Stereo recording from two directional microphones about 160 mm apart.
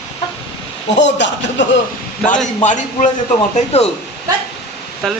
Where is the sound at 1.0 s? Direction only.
90° left.